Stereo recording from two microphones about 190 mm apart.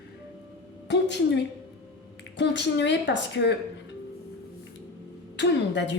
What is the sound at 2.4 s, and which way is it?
Speech, 70° left (ahead or behind).